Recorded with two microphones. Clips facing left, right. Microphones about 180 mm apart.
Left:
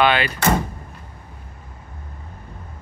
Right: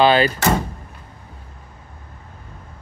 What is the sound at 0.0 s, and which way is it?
Speech, 35° right (ahead or behind).